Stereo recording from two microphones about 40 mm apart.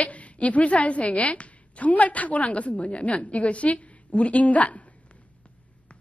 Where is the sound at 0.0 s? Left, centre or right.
Left.